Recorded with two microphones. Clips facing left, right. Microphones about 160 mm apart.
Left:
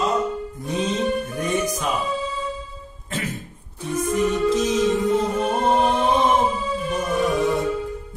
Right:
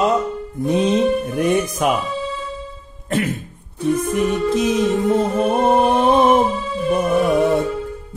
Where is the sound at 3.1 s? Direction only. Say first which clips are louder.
Right 8 dB; 55° right (ahead or behind).